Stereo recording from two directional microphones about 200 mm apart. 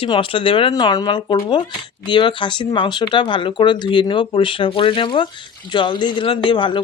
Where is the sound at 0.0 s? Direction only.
25° left (ahead or behind).